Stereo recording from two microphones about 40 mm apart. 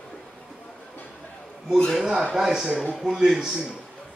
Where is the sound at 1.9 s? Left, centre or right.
Centre.